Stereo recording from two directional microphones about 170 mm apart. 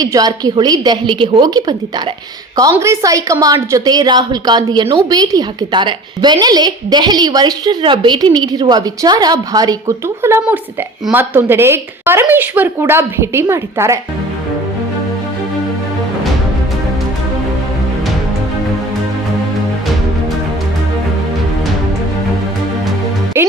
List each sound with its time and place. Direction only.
0.0 s a woman's voice: 20° right (ahead or behind)
2.7 s a woman's voice: 15° right (ahead or behind)
23.3 s a woman's voice: 15° right (ahead or behind)